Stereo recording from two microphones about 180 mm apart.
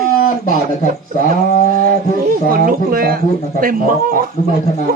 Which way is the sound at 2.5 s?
55° right (ahead or behind).